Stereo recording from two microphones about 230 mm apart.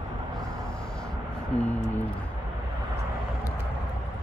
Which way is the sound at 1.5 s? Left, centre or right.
Left.